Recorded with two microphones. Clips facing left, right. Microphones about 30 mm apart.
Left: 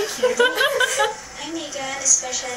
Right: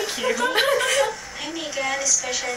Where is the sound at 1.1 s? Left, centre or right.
Centre.